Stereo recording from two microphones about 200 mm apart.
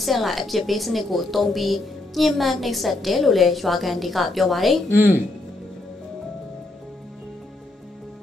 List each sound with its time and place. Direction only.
0.0 s a woman's voice: centre (ahead or behind)